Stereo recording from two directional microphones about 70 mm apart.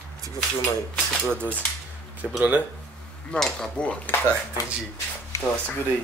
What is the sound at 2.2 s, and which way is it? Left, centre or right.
Speech, centre.